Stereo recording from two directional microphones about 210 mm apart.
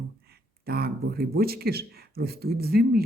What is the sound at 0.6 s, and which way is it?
Speech, 45° right (ahead or behind).